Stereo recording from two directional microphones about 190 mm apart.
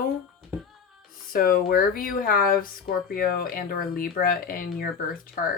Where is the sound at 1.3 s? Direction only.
50° left (ahead or behind).